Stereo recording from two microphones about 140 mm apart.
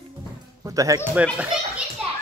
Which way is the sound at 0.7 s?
25° right (ahead or behind).